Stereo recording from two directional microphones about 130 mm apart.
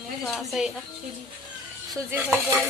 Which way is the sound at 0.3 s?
Centre (ahead or behind).